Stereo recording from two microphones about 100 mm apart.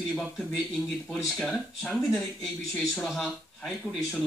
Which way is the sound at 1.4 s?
Centre (ahead or behind).